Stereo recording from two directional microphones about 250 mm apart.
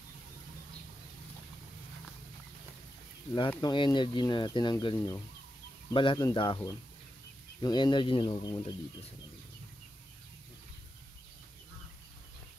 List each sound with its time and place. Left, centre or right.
3.4 s speech: centre